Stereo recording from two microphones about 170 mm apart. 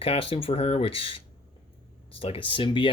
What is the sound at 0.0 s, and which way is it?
Speech, 35° left (ahead or behind).